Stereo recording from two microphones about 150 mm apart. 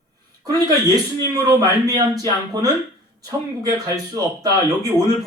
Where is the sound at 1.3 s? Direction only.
25° right (ahead or behind).